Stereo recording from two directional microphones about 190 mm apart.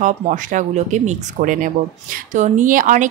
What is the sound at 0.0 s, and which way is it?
A woman's voice, 40° right (ahead or behind).